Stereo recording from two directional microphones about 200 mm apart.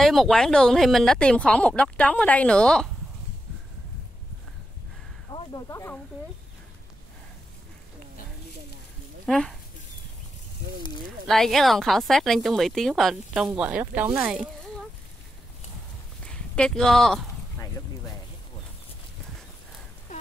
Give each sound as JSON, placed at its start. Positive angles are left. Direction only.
{"t": 0.0, "sound": "speech", "side_deg": 0}
{"t": 5.3, "sound": "speech", "side_deg": 20}
{"t": 9.2, "sound": "speech", "side_deg": 0}
{"t": 11.2, "sound": "speech", "side_deg": 0}
{"t": 16.3, "sound": "speech", "side_deg": 5}
{"t": 20.1, "sound": "a sound", "side_deg": 35}